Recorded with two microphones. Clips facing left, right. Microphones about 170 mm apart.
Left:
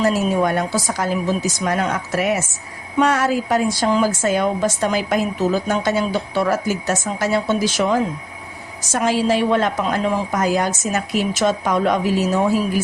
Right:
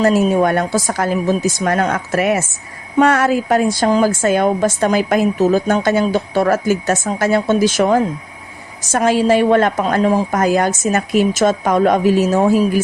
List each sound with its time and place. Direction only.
0.0 s a woman's voice: 55° right (ahead or behind)